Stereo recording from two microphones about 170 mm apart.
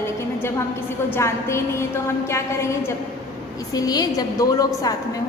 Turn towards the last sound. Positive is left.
turn(degrees=20)  # may be behind; listen again after turning